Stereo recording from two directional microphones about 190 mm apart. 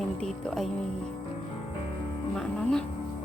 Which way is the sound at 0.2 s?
Centre (ahead or behind).